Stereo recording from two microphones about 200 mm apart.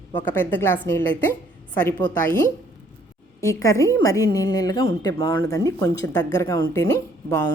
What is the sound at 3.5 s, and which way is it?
Speech, 15° left (ahead or behind).